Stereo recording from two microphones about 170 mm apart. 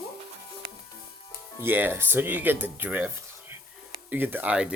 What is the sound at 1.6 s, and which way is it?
Speech, 10° right (ahead or behind).